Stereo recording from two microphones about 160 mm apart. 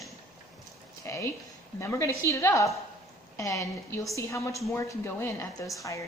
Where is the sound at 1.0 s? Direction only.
20° left (ahead or behind).